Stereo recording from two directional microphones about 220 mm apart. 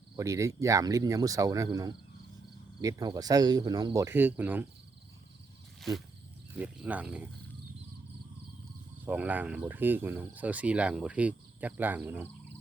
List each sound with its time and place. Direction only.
0.2 s speech: 15° right (ahead or behind)
6.6 s speech: 5° right (ahead or behind)
9.0 s speech: 5° right (ahead or behind)